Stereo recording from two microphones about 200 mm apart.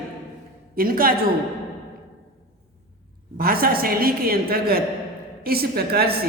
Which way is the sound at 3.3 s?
45° right (ahead or behind).